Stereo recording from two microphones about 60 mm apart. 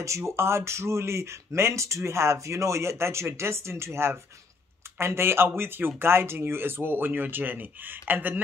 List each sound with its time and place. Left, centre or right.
0.0 s speech: right